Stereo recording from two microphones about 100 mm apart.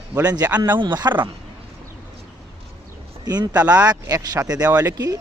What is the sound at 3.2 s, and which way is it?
Speech, 45° right (ahead or behind).